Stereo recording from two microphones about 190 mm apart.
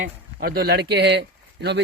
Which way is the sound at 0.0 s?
50° right (ahead or behind).